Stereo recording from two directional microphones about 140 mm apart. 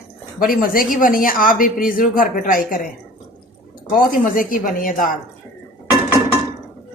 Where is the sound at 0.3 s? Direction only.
90° left.